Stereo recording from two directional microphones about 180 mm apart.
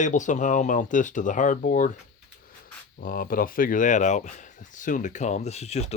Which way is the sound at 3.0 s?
50° left (ahead or behind).